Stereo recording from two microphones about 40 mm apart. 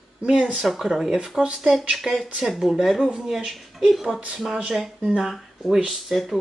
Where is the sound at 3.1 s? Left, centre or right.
Centre.